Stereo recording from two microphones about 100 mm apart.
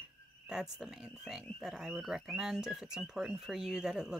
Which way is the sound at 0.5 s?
5° right (ahead or behind).